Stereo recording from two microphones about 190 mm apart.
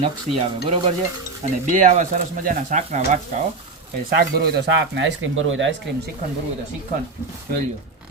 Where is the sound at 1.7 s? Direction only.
40° right (ahead or behind).